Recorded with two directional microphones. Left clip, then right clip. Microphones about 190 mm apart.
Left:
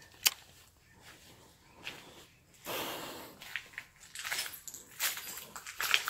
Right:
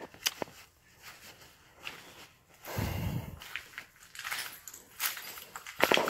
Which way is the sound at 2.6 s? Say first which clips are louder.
Left 1 dB; 25° left (ahead or behind).